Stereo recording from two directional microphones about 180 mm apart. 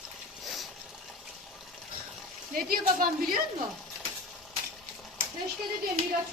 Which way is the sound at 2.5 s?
50° right (ahead or behind).